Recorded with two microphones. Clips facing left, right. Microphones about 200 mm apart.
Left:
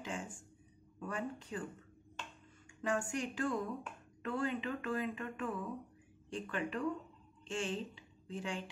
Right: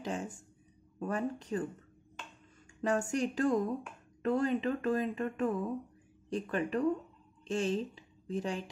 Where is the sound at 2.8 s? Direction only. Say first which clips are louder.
Right 6 dB; 40° right (ahead or behind).